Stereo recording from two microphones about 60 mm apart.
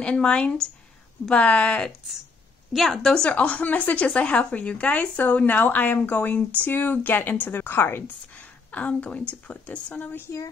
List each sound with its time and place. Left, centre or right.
0.0 s a woman's voice: centre
2.7 s a woman's voice: centre; by 8.0 s left
8.3 s a woman's voice: left